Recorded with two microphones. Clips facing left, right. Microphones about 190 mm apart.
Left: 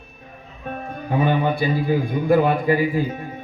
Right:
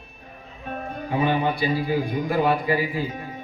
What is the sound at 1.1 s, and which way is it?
A man's voice, 50° left (ahead or behind).